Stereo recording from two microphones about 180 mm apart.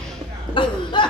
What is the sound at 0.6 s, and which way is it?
Chuckle, 25° left (ahead or behind).